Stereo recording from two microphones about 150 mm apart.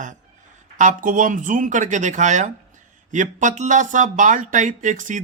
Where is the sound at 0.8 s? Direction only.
60° right (ahead or behind).